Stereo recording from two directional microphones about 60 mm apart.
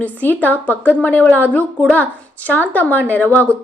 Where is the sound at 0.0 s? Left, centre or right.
Left.